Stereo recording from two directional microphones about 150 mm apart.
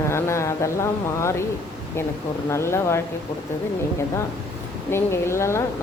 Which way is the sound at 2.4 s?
15° left (ahead or behind).